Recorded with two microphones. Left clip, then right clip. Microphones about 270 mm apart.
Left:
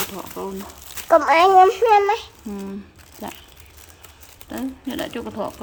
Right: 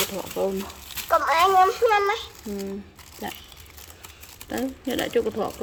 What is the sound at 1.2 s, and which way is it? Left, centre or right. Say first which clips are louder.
A woman's voice: left 5 dB; left.